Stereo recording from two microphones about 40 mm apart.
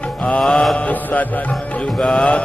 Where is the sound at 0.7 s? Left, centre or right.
Left.